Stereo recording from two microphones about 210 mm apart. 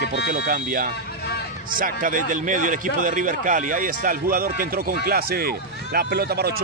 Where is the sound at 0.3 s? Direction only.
45° right (ahead or behind).